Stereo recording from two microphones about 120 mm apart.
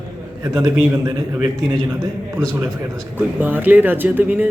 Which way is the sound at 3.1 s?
15° right (ahead or behind).